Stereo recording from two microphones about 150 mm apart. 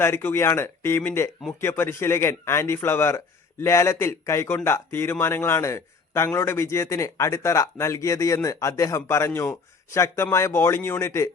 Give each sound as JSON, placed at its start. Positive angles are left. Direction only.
{"t": 0.0, "sound": "a man's voice", "side_deg": 15}